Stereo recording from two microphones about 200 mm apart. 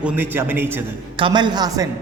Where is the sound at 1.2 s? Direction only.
25° right (ahead or behind).